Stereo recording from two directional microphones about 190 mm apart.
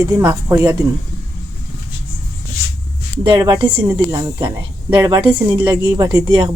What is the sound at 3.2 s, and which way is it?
Speech, 20° right (ahead or behind).